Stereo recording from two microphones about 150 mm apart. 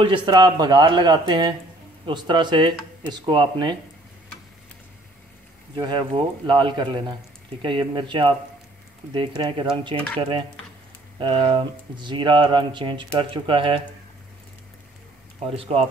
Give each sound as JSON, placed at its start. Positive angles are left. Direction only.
{"t": 0.0, "sound": "speech", "side_deg": -35}
{"t": 5.8, "sound": "speech", "side_deg": -30}
{"t": 15.3, "sound": "speech", "side_deg": -40}